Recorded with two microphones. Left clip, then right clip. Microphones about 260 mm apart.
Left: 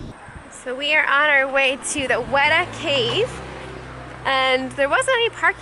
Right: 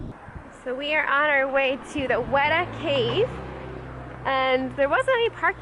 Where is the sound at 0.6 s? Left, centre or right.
Centre.